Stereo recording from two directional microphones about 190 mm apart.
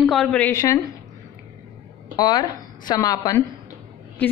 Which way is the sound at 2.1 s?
20° left (ahead or behind).